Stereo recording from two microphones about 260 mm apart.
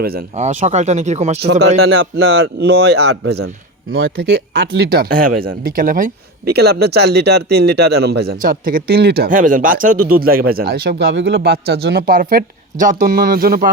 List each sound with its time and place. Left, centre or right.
0.0 s speech: right
1.8 s speech: right